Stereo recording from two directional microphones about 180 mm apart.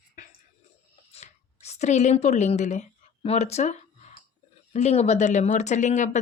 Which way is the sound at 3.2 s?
35° left (ahead or behind).